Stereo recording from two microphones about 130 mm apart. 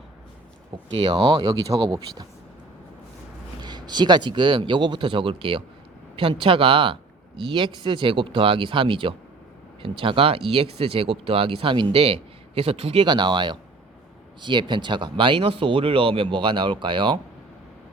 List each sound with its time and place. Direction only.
0.9 s speech: 45° right (ahead or behind)
3.6 s speech: 35° right (ahead or behind)